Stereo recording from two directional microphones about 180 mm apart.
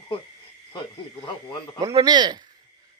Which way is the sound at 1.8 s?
25° right (ahead or behind).